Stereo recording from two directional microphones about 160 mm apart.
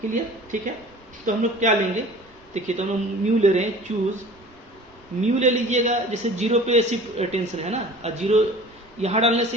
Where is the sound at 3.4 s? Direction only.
45° right (ahead or behind).